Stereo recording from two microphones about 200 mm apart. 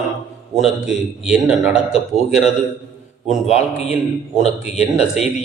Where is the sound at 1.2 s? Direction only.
5° right (ahead or behind).